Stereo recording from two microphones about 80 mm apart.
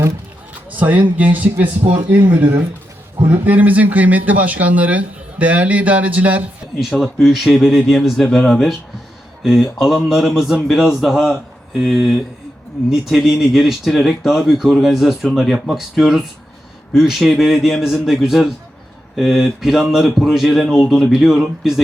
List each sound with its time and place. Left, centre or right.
0.7 s speech: right
3.4 s speech: right
7.0 s speech: centre